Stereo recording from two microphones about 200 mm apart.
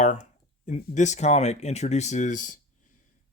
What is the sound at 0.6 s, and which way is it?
Speech, 35° left (ahead or behind).